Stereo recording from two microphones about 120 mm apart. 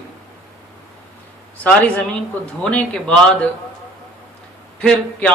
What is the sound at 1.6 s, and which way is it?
A woman's voice, 10° left (ahead or behind).